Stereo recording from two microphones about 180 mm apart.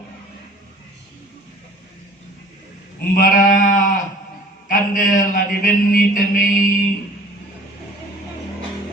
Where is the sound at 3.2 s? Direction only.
50° left (ahead or behind).